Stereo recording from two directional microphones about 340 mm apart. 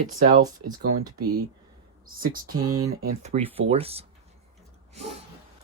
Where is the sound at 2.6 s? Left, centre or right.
Centre.